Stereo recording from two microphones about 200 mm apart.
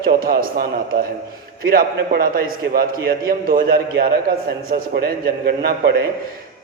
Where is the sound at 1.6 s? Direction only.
45° right (ahead or behind).